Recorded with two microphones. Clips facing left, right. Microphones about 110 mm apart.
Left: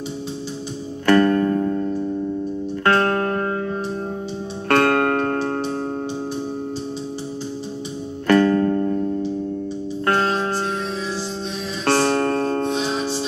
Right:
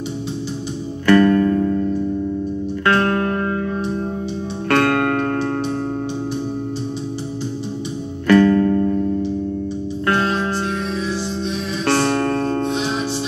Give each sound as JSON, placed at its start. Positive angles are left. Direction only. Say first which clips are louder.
{"t": 1.0, "sound": "music", "louder": "right 2 dB", "side_deg": 40}
{"t": 4.6, "sound": "music", "louder": "even", "side_deg": 40}
{"t": 8.3, "sound": "music", "louder": "right 3 dB", "side_deg": 40}
{"t": 10.0, "sound": "music", "louder": "right 1 dB", "side_deg": 40}
{"t": 11.8, "sound": "music", "louder": "even", "side_deg": 40}